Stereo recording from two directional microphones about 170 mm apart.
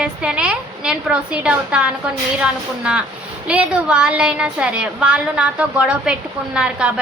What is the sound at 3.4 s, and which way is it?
A woman's voice, 5° right (ahead or behind).